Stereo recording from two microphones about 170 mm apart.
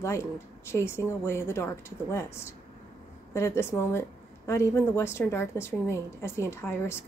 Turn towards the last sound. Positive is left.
turn(degrees=15)  # may be behind; listen again after turning